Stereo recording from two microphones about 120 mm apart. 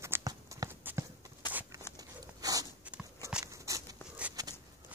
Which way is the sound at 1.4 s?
35° left (ahead or behind).